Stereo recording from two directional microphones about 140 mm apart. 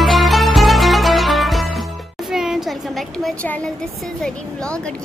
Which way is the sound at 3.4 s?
10° left (ahead or behind).